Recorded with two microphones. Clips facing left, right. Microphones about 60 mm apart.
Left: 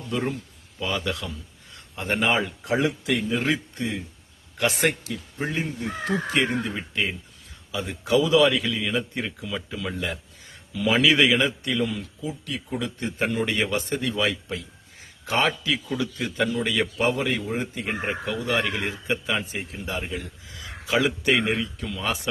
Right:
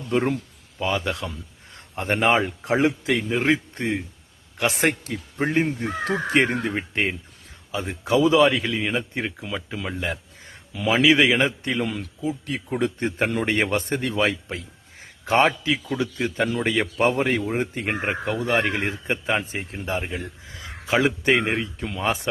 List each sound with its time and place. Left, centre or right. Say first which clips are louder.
0.1 s speech: right 5 dB; right
0.8 s a man's voice: right 3 dB; right
5.0 s a man's voice: right 4 dB; right
6.5 s speech: right 2 dB; right
7.7 s a man's voice: right 1 dB; right
10.8 s a man's voice: right 2 dB; right
11.9 s a man's voice: right 4 dB; right
17.7 s speech: right 3 dB; right
18.3 s a man's voice: right 3 dB; right